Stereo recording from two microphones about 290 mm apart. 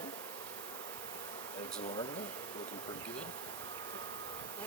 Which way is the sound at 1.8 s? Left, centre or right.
Left.